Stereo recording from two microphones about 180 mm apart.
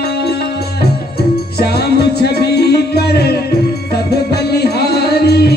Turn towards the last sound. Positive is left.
turn(degrees=65)  # may be behind; listen again after turning